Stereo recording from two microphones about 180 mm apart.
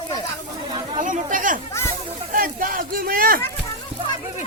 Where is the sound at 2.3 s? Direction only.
50° right (ahead or behind).